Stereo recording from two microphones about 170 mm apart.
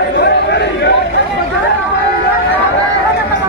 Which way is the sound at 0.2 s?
85° left.